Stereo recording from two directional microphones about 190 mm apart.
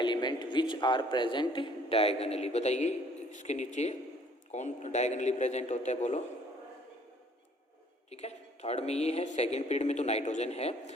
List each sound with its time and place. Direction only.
0.0 s speech: 25° left (ahead or behind)
8.1 s speech: 35° left (ahead or behind)